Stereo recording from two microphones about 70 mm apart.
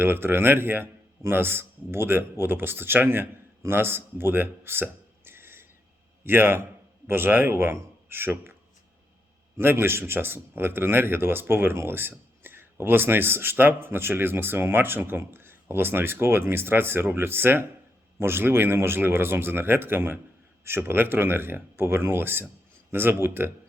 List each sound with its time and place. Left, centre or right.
0.0 s a man's voice: right
9.6 s a man's voice: right